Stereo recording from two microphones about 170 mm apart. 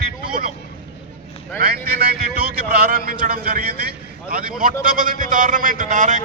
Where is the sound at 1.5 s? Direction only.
60° right (ahead or behind).